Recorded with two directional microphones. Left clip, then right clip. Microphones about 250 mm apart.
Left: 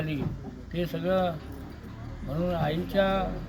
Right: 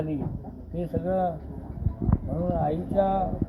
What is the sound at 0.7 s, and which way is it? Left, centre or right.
Speech, left.